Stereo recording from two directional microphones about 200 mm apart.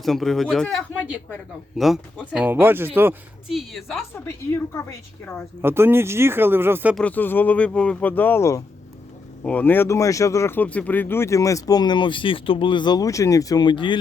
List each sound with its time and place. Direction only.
0.0 s speech: centre (ahead or behind)
5.2 s speech: 10° left (ahead or behind)
5.6 s speech: 10° right (ahead or behind)
6.9 s speech: 5° left (ahead or behind); by 13.9 s 25° left (ahead or behind)